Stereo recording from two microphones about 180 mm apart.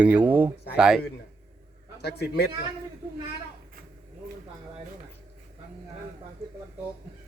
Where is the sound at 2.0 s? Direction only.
65° left (ahead or behind).